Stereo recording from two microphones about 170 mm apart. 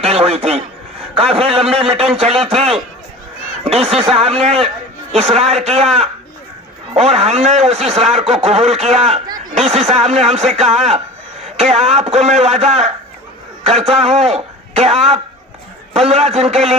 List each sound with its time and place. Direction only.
0.0 s a man's voice: 35° right (ahead or behind)